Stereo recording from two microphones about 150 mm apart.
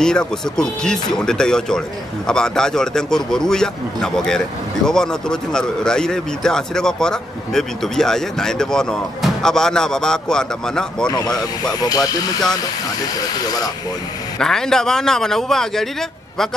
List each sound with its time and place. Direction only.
0.0 s speech: 5° left (ahead or behind)
11.8 s speech: 25° left (ahead or behind)
14.4 s speech: 5° left (ahead or behind)